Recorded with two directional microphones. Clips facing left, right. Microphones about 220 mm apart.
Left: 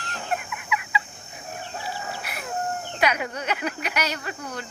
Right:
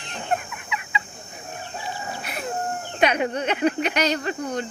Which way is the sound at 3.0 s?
30° right (ahead or behind).